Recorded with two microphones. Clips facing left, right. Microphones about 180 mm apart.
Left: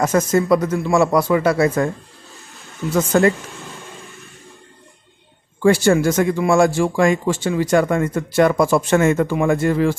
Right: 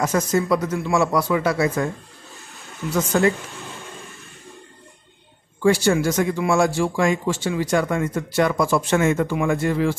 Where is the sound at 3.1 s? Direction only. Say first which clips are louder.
Left 4 dB; 55° left (ahead or behind).